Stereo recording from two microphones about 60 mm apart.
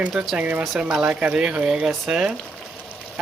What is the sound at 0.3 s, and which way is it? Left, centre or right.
Speech, right.